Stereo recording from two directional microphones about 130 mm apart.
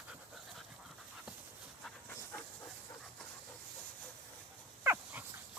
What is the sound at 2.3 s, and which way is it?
Dog, 10° left (ahead or behind).